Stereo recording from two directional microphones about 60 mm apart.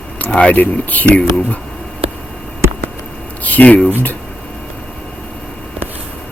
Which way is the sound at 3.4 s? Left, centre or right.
Left.